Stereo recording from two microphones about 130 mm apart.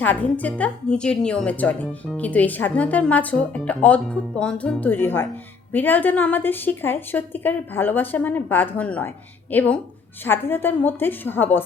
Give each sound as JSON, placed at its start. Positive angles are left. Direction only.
{"t": 0.0, "sound": "a woman's voice", "side_deg": 10}